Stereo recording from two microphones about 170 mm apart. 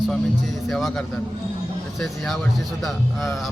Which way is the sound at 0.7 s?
Centre (ahead or behind).